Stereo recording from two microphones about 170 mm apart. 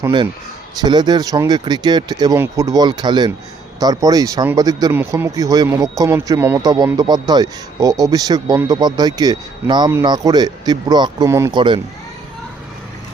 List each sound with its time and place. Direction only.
0.8 s speech: 25° right (ahead or behind)
11.5 s speech: 30° right (ahead or behind)